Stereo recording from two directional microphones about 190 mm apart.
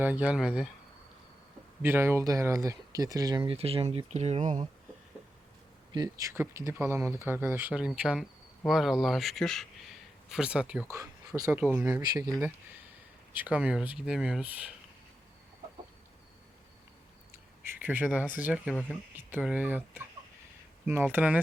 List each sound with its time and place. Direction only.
0.0 s speech: 10° right (ahead or behind)
1.8 s speech: 10° right (ahead or behind); by 4.6 s 35° right (ahead or behind)
5.9 s speech: 20° right (ahead or behind)
11.3 s speech: 15° right (ahead or behind)
13.3 s speech: 10° right (ahead or behind)
17.8 s speech: 10° right (ahead or behind)
18.7 s speech: 5° left (ahead or behind)
19.1 s speech: 5° right (ahead or behind)